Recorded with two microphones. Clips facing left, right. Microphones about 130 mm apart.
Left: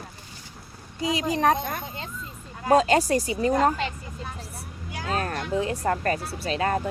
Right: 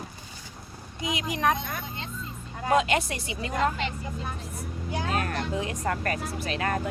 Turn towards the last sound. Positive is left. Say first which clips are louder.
# left 3 dB
turn(degrees=30)  # may be behind; listen again after turning